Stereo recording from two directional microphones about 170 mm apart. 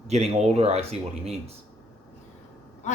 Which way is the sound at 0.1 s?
40° right (ahead or behind).